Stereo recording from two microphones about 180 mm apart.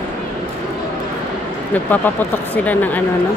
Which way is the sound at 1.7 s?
10° left (ahead or behind).